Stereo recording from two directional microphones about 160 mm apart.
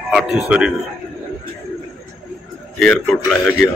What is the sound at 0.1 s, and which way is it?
Speech, 5° right (ahead or behind).